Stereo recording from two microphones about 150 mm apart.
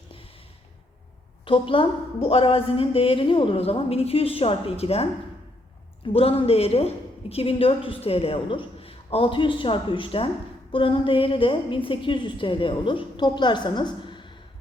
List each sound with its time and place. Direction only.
1.5 s a woman's voice: 35° left (ahead or behind)
6.1 s a woman's voice: 40° left (ahead or behind)